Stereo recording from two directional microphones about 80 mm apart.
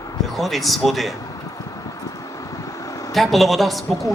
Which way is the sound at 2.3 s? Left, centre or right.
Left.